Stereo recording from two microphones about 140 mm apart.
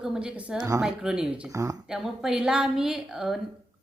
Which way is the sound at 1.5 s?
25° right (ahead or behind).